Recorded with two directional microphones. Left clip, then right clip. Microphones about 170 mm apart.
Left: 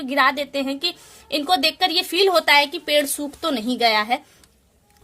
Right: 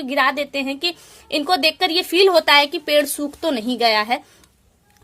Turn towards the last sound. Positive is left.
turn(degrees=-20)  # may be behind; listen again after turning